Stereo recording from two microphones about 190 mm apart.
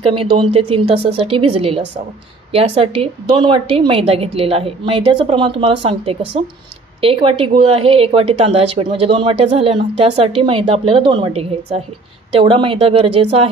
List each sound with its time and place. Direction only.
0.0 s a woman's voice: 30° right (ahead or behind)